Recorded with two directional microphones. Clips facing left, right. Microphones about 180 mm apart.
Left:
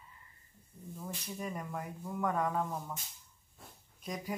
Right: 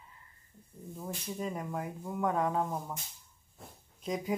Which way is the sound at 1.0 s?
20° right (ahead or behind).